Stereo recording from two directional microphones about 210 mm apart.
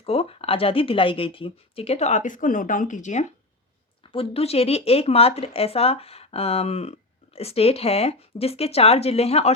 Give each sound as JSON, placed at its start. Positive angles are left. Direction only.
{"t": 0.0, "sound": "speech", "side_deg": 25}